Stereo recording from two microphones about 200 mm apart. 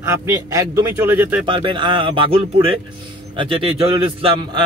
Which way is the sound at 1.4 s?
25° right (ahead or behind).